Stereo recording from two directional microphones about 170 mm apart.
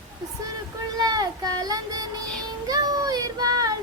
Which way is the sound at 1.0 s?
20° right (ahead or behind).